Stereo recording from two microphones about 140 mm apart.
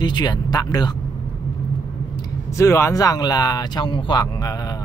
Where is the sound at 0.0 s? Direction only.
30° left (ahead or behind).